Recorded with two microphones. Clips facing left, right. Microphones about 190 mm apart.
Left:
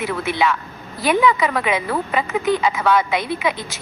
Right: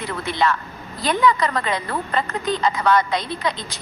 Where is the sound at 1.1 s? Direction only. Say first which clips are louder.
Left 2 dB; 5° left (ahead or behind).